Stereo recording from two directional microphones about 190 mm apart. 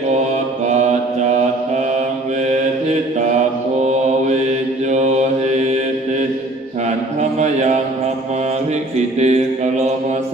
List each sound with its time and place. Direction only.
4.9 s mantra: 35° right (ahead or behind)
9.0 s mantra: 35° right (ahead or behind)